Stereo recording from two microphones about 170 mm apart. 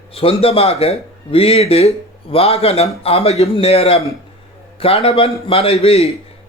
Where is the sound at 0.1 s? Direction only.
35° left (ahead or behind).